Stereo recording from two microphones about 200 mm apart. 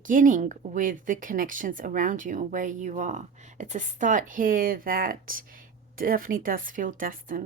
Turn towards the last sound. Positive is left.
turn(degrees=-45)  # may be behind; listen again after turning